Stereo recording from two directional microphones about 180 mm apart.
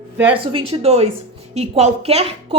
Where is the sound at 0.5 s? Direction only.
35° right (ahead or behind).